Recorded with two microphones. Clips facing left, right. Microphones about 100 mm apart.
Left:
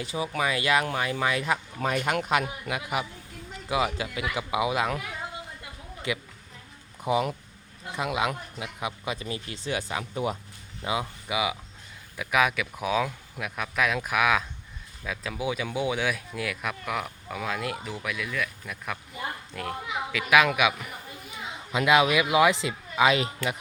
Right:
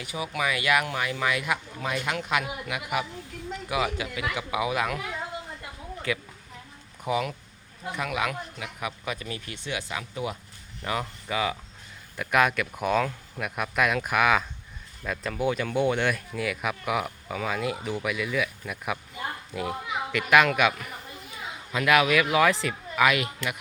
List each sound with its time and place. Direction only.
0.0 s speech: 30° left (ahead or behind)
6.1 s speech: 20° left (ahead or behind)
7.1 s speech: 30° left (ahead or behind)
10.8 s speech: 15° left (ahead or behind); by 19.7 s 5° right (ahead or behind)
20.1 s speech: 5° left (ahead or behind)
21.7 s speech: 20° left (ahead or behind)